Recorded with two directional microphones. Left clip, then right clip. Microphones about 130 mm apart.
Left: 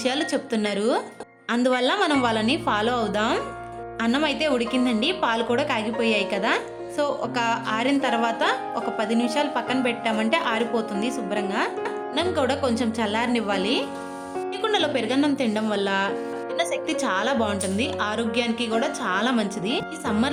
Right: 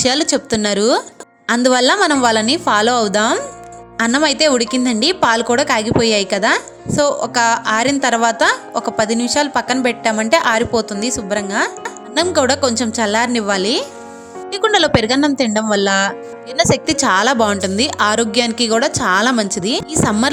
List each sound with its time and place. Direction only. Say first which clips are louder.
0.0 s speech: right 9 dB; 45° right (ahead or behind)